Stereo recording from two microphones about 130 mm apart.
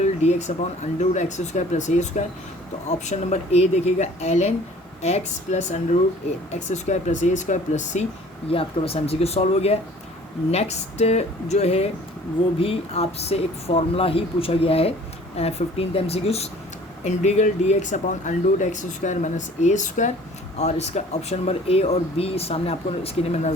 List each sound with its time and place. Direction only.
0.0 s a sound: 60° left (ahead or behind)
0.9 s speech: 65° left (ahead or behind)
8.4 s speech: 45° left (ahead or behind); by 20.1 s 70° left (ahead or behind)
20.6 s speech: 55° left (ahead or behind)